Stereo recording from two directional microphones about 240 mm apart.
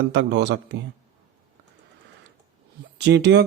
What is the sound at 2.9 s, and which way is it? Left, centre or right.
Speech, right.